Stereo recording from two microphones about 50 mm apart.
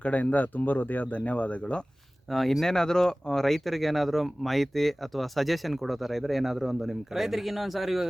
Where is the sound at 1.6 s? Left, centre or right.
Centre.